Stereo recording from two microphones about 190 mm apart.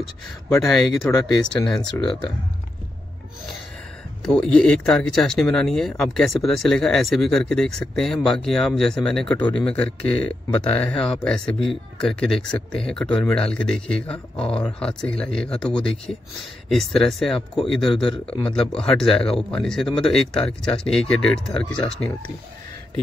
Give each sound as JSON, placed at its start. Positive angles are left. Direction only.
{"t": 0.0, "sound": "speech", "side_deg": 0}
{"t": 1.8, "sound": "speech", "side_deg": 25}
{"t": 4.2, "sound": "speech", "side_deg": 5}